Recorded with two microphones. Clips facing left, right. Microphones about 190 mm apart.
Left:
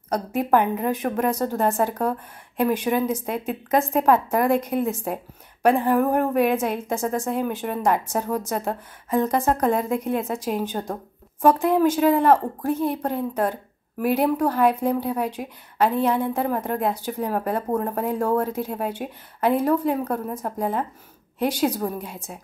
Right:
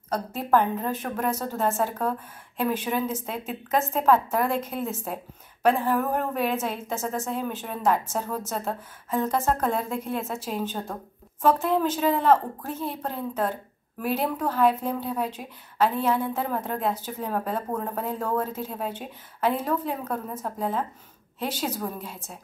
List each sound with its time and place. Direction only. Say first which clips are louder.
0.1 s a woman's voice: left 3 dB; 15° left (ahead or behind)